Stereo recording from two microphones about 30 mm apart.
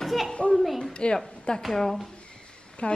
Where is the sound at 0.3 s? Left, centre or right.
Left.